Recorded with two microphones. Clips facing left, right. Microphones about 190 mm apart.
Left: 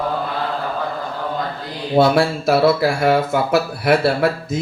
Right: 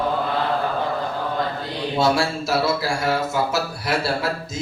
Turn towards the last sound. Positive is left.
turn(degrees=55)  # may be behind; listen again after turning